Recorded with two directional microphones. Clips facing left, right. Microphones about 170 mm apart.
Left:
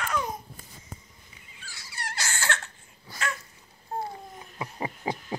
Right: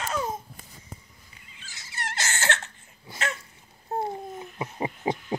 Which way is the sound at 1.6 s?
20° right (ahead or behind).